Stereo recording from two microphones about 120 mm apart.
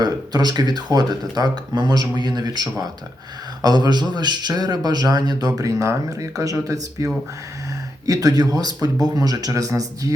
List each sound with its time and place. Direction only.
0.0 s speech: 35° right (ahead or behind)